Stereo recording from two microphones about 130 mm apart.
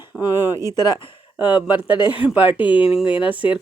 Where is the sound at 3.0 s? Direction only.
40° left (ahead or behind).